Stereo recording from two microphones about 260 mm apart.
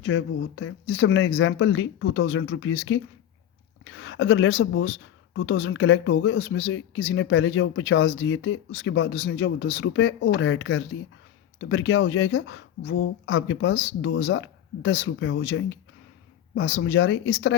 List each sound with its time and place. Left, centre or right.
0.0 s speech: left